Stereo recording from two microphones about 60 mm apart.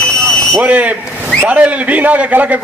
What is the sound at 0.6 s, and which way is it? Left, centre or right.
A man's voice, right.